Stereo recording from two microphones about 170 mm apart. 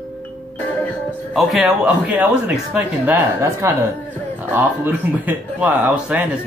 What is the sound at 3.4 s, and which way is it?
Speech, 20° right (ahead or behind).